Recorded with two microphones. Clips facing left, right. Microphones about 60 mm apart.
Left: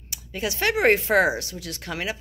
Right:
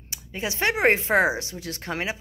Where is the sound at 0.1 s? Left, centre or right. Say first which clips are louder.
Left 2 dB; right.